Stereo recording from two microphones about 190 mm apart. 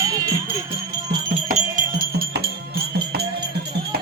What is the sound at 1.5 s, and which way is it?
Music, 50° right (ahead or behind).